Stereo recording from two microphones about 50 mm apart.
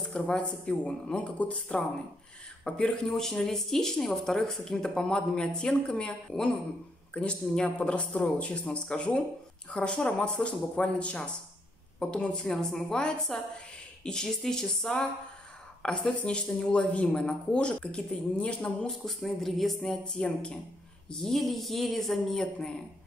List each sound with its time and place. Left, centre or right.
0.1 s speech: left
3.1 s speech: centre
18.9 s speech: centre